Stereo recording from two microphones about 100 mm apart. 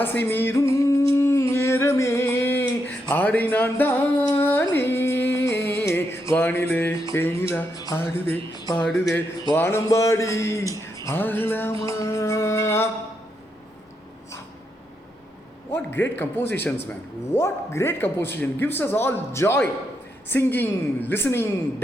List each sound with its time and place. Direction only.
0.0 s a sound: 20° left (ahead or behind)
4.4 s carnatic music: 20° left (ahead or behind)
4.7 s music: 20° left (ahead or behind)
7.0 s a man's voice: 25° left (ahead or behind)
8.5 s speech: 40° left (ahead or behind)
8.8 s a man's voice: centre (ahead or behind)
9.6 s a man's voice: 25° left (ahead or behind)
11.2 s a man's voice: 20° left (ahead or behind)
11.9 s a man's voice: 30° left (ahead or behind)
15.7 s a man's voice: 20° left (ahead or behind)